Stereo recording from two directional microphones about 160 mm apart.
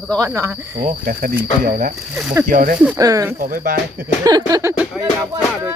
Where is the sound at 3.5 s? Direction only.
60° right (ahead or behind).